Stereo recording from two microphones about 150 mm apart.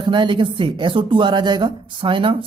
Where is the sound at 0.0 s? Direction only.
35° right (ahead or behind).